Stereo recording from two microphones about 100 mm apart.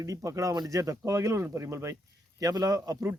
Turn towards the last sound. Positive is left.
turn(degrees=-35)  # may be behind; listen again after turning